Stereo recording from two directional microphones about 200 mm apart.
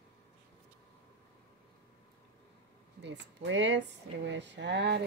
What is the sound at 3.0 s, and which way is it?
Speech, 65° right (ahead or behind).